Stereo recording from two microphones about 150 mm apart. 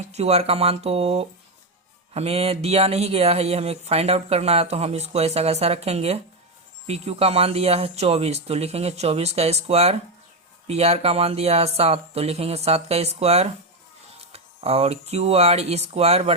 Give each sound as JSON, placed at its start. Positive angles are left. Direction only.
{"t": 0.0, "sound": "speech", "side_deg": -45}